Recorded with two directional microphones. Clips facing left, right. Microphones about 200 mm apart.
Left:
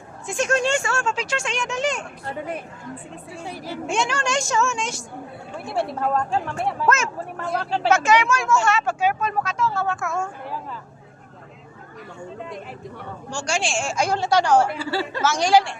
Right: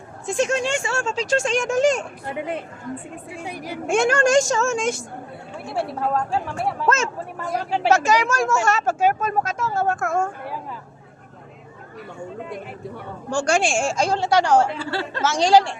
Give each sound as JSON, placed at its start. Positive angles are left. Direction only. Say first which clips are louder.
{"t": 0.3, "sound": "a woman's voice", "louder": "right 3 dB", "side_deg": -30}
{"t": 0.5, "sound": "speech", "louder": "left 2 dB", "side_deg": -15}
{"t": 0.9, "sound": "speech", "louder": "right 2 dB", "side_deg": -35}
{"t": 2.2, "sound": "a woman's voice", "louder": "right 2 dB", "side_deg": -15}
{"t": 3.8, "sound": "speech", "louder": "right 7 dB", "side_deg": -50}
{"t": 5.7, "sound": "speech", "louder": "even", "side_deg": -5}
{"t": 6.8, "sound": "a woman's voice", "louder": "even", "side_deg": -30}
{"t": 7.5, "sound": "speech", "louder": "right 1 dB", "side_deg": -10}
{"t": 7.9, "sound": "speech", "louder": "even", "side_deg": -40}
{"t": 13.3, "sound": "speech", "louder": "right 6 dB", "side_deg": -55}
{"t": 14.0, "sound": "a woman's voice", "louder": "even", "side_deg": -25}
{"t": 14.8, "sound": "speech", "louder": "left 1 dB", "side_deg": 5}
{"t": 15.2, "sound": "speech", "louder": "right 2 dB", "side_deg": -30}